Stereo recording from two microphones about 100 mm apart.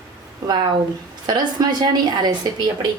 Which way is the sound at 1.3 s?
45° right (ahead or behind).